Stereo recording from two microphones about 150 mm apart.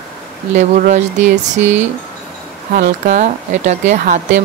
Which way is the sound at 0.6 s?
55° right (ahead or behind).